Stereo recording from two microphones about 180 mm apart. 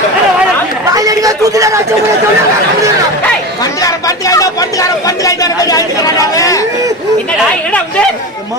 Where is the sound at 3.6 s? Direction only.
20° left (ahead or behind).